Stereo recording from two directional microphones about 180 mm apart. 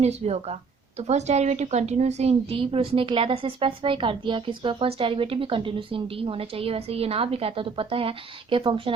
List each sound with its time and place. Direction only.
0.0 s speech: 35° right (ahead or behind)